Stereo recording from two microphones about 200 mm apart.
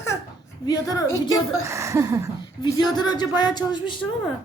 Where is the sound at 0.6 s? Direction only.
20° left (ahead or behind).